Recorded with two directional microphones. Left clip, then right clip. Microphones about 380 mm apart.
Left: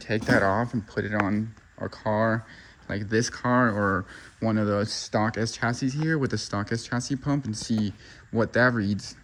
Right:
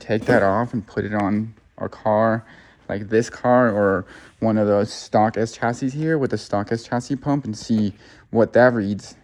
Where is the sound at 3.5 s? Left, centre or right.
Right.